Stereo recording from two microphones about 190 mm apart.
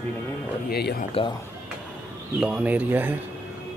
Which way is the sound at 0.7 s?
55° left (ahead or behind).